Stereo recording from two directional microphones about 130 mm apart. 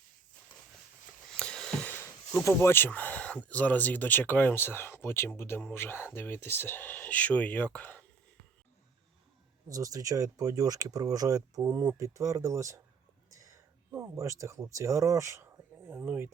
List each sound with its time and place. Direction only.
1.4 s a sound: 5° left (ahead or behind)
1.9 s speech: 15° left (ahead or behind)
9.6 s speech: 25° right (ahead or behind)